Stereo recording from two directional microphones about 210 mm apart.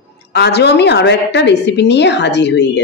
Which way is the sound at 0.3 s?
50° left (ahead or behind).